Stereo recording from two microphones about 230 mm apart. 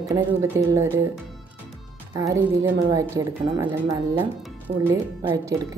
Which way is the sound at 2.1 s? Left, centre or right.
Centre.